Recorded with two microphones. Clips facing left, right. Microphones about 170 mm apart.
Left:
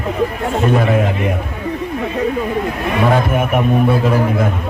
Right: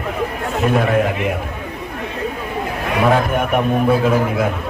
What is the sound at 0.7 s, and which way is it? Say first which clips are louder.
Speech: right 1 dB; centre (ahead or behind).